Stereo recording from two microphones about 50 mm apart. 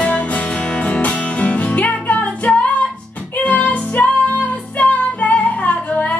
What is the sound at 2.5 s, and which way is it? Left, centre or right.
Music, centre.